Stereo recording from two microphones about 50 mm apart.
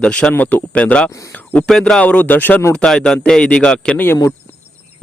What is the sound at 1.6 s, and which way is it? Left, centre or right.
Speech, centre.